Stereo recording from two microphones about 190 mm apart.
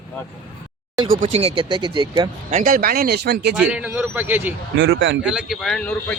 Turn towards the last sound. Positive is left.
turn(degrees=5)  # may be behind; listen again after turning